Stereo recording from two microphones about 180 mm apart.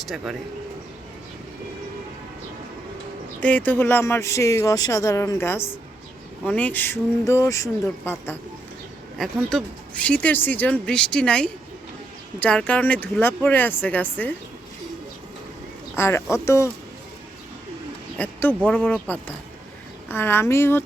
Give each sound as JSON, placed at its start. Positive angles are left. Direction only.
{"t": 0.1, "sound": "speech", "side_deg": 0}
{"t": 3.4, "sound": "speech", "side_deg": 10}
{"t": 9.1, "sound": "speech", "side_deg": 0}
{"t": 16.0, "sound": "speech", "side_deg": 15}
{"t": 18.2, "sound": "speech", "side_deg": 10}